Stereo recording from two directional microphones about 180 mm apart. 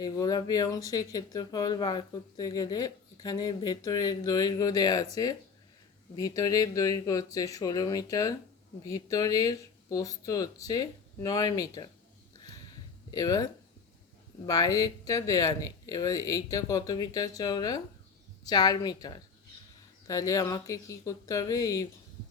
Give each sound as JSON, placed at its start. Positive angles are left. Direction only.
{"t": 0.0, "sound": "speech", "side_deg": 20}
{"t": 13.1, "sound": "speech", "side_deg": 20}